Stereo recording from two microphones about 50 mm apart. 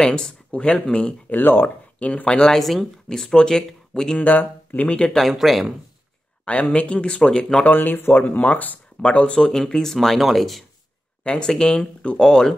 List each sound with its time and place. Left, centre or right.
0.0 s speech: centre
1.3 s speech: left
2.0 s speech: left
2.5 s speech: centre
4.2 s speech: left
5.1 s speech: centre
6.4 s speech: left
7.2 s speech: centre
7.6 s speech: left; by 9.9 s centre
9.9 s speech: centre
11.2 s speech: centre